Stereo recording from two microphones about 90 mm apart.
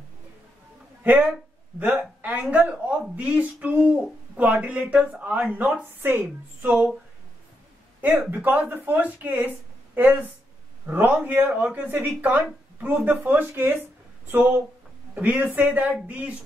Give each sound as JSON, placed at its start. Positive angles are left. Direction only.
{"t": 1.8, "sound": "speech", "side_deg": -20}
{"t": 8.3, "sound": "speech", "side_deg": -20}